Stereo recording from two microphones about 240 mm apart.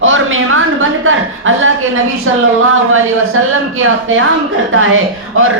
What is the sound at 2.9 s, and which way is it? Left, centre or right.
A woman's voice, right.